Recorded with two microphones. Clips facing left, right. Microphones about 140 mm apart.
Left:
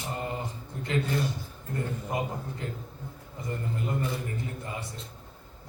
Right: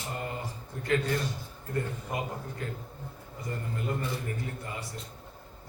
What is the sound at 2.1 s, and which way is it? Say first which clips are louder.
Speech: left 2 dB; 25° left (ahead or behind).